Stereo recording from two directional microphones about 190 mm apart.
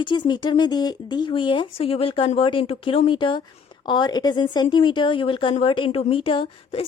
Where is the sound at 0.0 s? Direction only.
25° left (ahead or behind).